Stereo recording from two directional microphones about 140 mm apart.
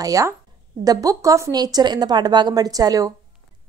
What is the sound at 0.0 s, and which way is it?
Speech, 25° right (ahead or behind).